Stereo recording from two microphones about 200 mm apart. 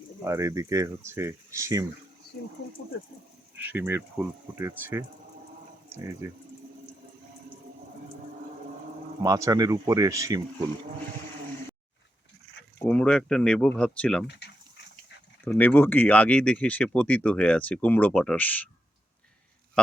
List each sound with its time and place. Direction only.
0.3 s speech: 15° right (ahead or behind)
3.5 s speech: 10° right (ahead or behind)
9.2 s speech: 15° right (ahead or behind)
12.8 s speech: 5° left (ahead or behind)
15.4 s speech: 10° left (ahead or behind)